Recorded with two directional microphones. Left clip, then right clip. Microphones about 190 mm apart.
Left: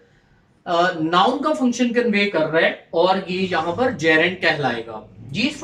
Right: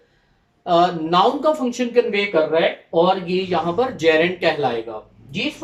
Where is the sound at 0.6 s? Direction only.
20° right (ahead or behind).